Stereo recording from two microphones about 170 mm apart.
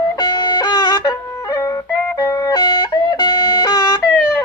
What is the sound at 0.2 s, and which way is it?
Wind instrument, 25° left (ahead or behind).